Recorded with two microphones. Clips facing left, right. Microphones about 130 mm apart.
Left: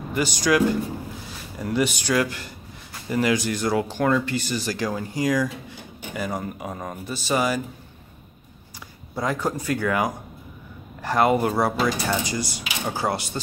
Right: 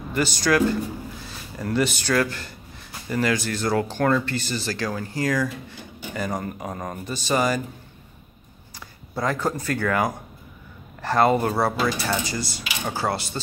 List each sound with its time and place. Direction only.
0.1 s speech: 15° left (ahead or behind)
9.1 s speech: 10° left (ahead or behind)